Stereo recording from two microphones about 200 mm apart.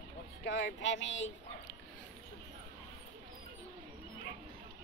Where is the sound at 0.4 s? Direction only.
60° left (ahead or behind).